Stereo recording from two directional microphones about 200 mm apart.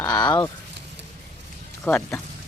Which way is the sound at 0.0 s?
20° left (ahead or behind).